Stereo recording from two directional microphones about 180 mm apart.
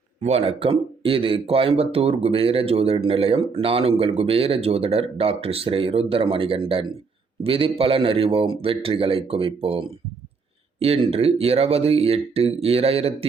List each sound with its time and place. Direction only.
0.2 s speech: 35° right (ahead or behind)